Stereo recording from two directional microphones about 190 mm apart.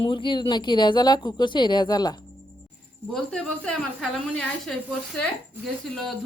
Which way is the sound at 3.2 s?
5° left (ahead or behind).